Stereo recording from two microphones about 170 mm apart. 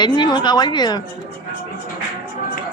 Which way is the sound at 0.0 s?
25° left (ahead or behind).